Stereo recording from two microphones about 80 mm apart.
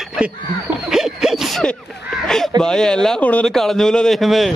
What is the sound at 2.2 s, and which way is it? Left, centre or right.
Speech, centre.